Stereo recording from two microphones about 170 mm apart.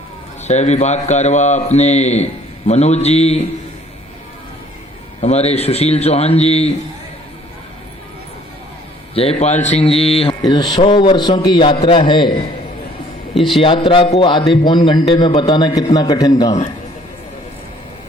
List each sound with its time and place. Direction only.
0.4 s a man's voice: 40° left (ahead or behind)
5.2 s a man's voice: 40° left (ahead or behind)
9.1 s a man's voice: 35° left (ahead or behind)
13.3 s a man's voice: centre (ahead or behind)
13.6 s a man's voice: 30° left (ahead or behind)